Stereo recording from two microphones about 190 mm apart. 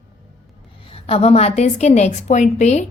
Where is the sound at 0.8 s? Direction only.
30° left (ahead or behind).